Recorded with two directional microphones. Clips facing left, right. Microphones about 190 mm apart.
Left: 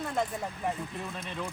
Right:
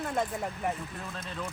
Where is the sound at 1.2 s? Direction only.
Centre (ahead or behind).